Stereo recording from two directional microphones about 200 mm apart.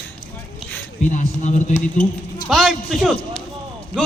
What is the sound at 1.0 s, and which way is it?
Speech, 40° left (ahead or behind).